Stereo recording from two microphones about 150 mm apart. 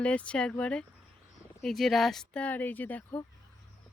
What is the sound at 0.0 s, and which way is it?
Speech, 10° left (ahead or behind).